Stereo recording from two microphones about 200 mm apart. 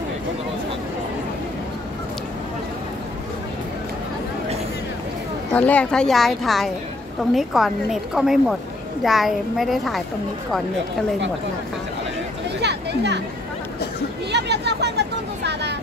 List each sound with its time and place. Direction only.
5.5 s speech: 5° left (ahead or behind)
12.6 s a sound: 60° right (ahead or behind)
14.3 s speech: 55° right (ahead or behind)